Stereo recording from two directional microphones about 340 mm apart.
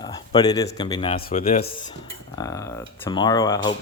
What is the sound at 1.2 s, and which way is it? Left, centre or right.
Cutlery, centre.